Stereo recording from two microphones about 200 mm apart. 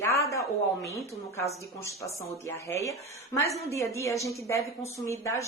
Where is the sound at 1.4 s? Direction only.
15° left (ahead or behind).